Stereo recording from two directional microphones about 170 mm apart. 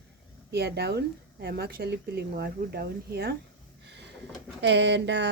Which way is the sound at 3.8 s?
80° right.